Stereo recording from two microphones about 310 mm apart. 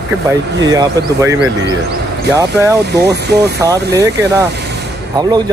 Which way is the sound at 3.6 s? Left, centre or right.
Centre.